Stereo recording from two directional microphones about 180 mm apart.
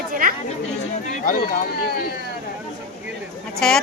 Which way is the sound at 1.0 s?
45° left (ahead or behind).